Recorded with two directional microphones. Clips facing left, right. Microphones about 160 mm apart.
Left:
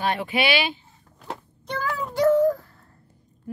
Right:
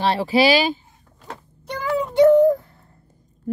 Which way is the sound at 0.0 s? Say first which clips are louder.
Right 7 dB; 35° right (ahead or behind).